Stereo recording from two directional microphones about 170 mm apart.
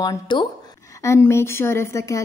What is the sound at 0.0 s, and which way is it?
A woman's voice, 25° left (ahead or behind).